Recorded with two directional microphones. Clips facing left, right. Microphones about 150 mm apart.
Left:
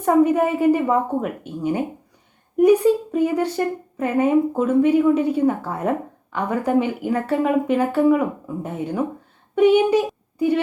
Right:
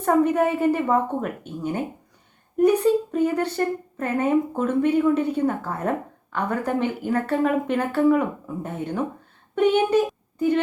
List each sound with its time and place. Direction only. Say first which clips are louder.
0.0 s speech: left 3 dB; 10° left (ahead or behind)